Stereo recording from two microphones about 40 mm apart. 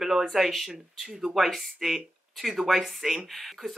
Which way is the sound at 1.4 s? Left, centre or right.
Centre.